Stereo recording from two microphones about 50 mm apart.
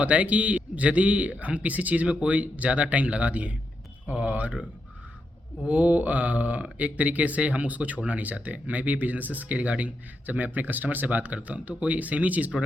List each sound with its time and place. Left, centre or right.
0.0 s a man's voice: right
5.6 s a man's voice: right